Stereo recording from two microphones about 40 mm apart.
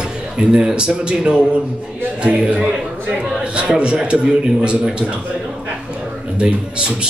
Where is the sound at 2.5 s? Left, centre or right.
Centre.